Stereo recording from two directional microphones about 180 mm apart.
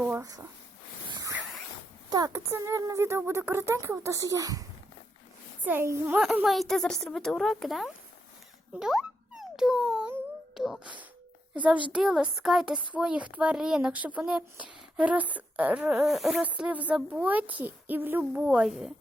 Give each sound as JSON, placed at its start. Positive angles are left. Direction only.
{"t": 0.0, "sound": "a sound", "side_deg": -15}
{"t": 1.1, "sound": "zipper", "side_deg": -20}
{"t": 2.0, "sound": "speech", "side_deg": -20}
{"t": 5.6, "sound": "speech", "side_deg": -15}
{"t": 6.2, "sound": "speech", "side_deg": 0}
{"t": 8.8, "sound": "a sound", "side_deg": -5}
{"t": 11.9, "sound": "speech", "side_deg": -5}